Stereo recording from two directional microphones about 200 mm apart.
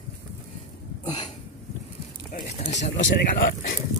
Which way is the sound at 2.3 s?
45° left (ahead or behind).